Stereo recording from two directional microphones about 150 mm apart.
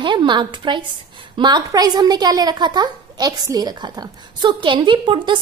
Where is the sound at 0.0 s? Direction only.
30° right (ahead or behind).